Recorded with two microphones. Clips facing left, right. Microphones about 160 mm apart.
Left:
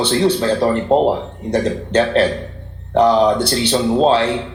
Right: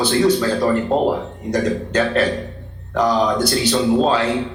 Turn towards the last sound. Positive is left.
turn(degrees=30)  # may be behind; listen again after turning